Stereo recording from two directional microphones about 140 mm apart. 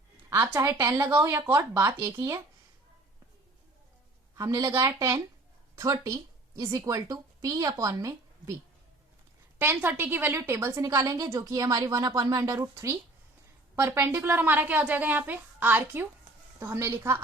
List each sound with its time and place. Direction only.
0.3 s a woman's voice: 15° right (ahead or behind)
4.4 s a woman's voice: 25° right (ahead or behind)
9.6 s a woman's voice: 15° right (ahead or behind)